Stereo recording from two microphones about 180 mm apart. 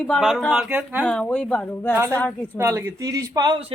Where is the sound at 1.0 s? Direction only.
5° left (ahead or behind).